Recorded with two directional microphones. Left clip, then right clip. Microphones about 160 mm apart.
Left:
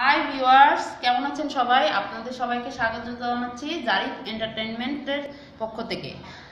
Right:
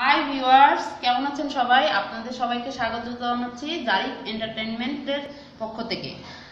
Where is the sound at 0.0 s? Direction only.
5° left (ahead or behind).